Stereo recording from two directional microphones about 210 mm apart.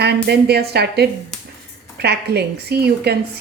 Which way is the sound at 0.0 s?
50° right (ahead or behind).